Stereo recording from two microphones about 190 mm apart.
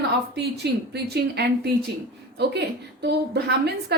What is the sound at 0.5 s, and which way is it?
A woman's voice, 60° right (ahead or behind).